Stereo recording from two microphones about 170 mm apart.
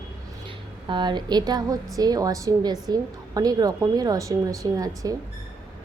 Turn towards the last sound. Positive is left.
turn(degrees=-20)  # may be behind; listen again after turning